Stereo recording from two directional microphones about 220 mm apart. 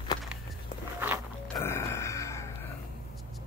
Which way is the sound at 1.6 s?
10° left (ahead or behind).